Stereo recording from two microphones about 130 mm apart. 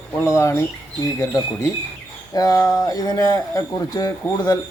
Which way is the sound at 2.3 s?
30° left (ahead or behind).